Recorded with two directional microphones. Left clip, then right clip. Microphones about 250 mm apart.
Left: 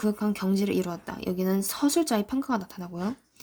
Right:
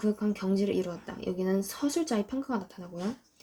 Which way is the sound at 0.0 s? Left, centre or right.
Left.